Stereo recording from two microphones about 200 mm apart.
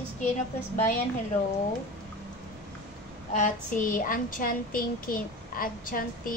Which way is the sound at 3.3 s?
40° left (ahead or behind).